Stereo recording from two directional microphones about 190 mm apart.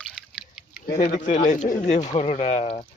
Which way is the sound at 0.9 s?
40° left (ahead or behind).